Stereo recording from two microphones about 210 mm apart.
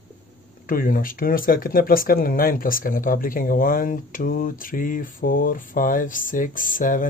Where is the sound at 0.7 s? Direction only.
40° left (ahead or behind).